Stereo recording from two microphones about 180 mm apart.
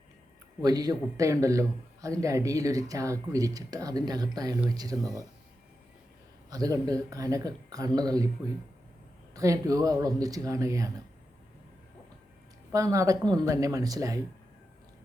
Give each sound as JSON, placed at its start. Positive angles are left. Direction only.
{"t": 0.6, "sound": "speech", "side_deg": -20}
{"t": 6.5, "sound": "speech", "side_deg": -20}
{"t": 9.3, "sound": "speech", "side_deg": -20}
{"t": 12.7, "sound": "speech", "side_deg": -20}